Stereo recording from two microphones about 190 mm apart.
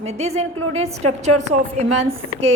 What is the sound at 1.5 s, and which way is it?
Speech, 35° right (ahead or behind).